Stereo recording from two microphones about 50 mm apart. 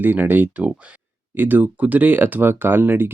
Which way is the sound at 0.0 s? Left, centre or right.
Right.